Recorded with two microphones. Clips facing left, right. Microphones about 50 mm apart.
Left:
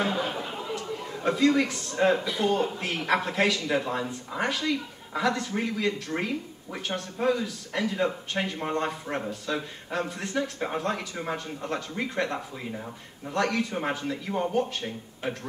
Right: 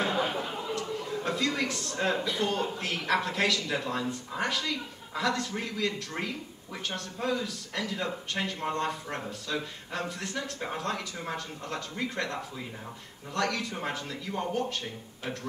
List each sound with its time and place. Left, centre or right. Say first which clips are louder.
0.2 s chatter: even; centre
0.7 s a man's voice: right 1 dB; centre
2.1 s a man's voice: left 1 dB; centre
2.4 s a man's voice: left 4 dB; left